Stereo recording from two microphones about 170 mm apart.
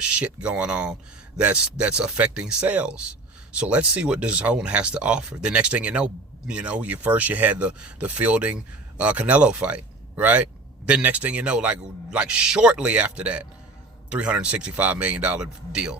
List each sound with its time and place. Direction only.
0.0 s speech: 5° right (ahead or behind)